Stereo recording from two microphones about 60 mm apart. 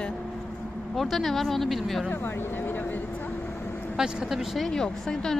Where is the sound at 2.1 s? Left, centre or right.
Left.